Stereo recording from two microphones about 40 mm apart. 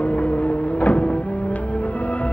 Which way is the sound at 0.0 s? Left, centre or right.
Left.